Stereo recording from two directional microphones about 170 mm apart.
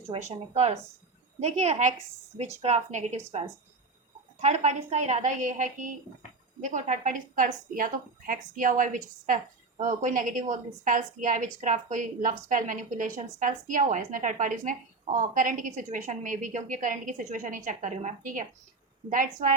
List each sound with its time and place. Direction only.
0.1 s a woman's voice: 40° right (ahead or behind)
4.4 s a woman's voice: 40° right (ahead or behind)